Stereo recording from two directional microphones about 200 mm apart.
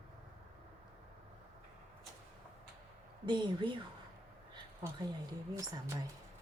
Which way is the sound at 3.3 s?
25° right (ahead or behind).